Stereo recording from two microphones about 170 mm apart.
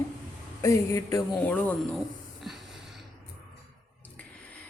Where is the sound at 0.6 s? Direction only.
15° left (ahead or behind).